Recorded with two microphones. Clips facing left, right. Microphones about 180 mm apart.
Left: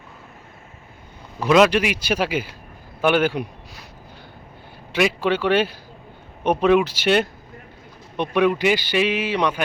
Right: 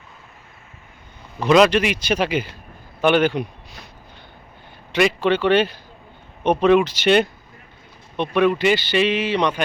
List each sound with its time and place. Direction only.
1.4 s a man's voice: 5° left (ahead or behind)
4.9 s a man's voice: 5° left (ahead or behind)